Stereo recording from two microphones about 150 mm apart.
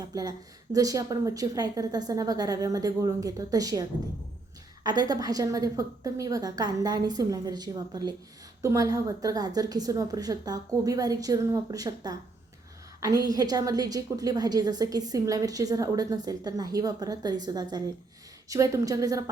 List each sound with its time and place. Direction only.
0.0 s a woman's voice: 25° right (ahead or behind)